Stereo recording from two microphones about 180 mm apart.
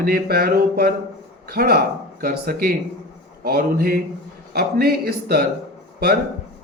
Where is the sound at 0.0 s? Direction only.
60° right (ahead or behind).